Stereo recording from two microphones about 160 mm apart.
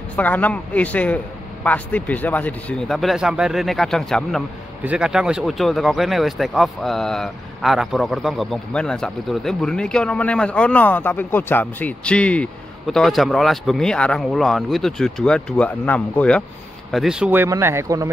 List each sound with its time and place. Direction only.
0.1 s a man's voice: 10° left (ahead or behind)
16.9 s speech: 5° right (ahead or behind); by 18.1 s 20° right (ahead or behind)